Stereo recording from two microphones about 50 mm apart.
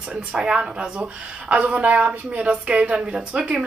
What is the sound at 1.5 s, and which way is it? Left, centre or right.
A woman's voice, right.